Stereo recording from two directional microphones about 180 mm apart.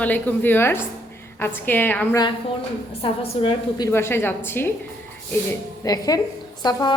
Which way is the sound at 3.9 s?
15° left (ahead or behind).